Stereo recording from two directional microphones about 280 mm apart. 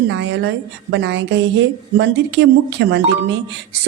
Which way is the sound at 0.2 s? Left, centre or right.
Right.